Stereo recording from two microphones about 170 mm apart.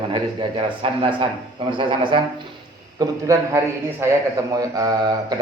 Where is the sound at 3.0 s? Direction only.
20° right (ahead or behind).